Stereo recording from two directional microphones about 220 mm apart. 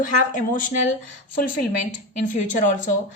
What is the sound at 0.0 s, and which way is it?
Speech, 35° left (ahead or behind).